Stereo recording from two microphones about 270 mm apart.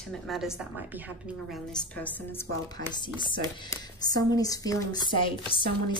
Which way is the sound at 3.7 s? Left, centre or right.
Centre.